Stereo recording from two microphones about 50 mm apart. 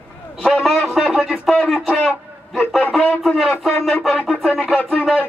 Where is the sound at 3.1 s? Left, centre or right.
Centre.